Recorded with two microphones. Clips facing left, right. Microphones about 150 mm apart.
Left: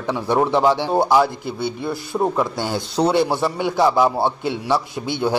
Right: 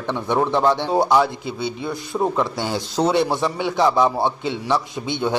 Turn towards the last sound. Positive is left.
turn(degrees=5)  # may be behind; listen again after turning